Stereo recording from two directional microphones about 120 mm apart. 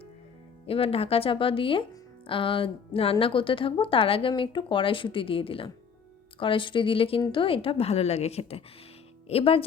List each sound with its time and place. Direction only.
0.7 s a woman's voice: 55° left (ahead or behind)